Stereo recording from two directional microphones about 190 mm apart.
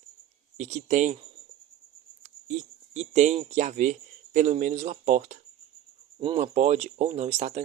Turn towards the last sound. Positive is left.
turn(degrees=-35)  # may be behind; listen again after turning